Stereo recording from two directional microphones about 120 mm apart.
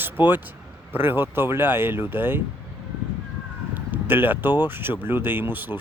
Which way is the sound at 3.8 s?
15° right (ahead or behind).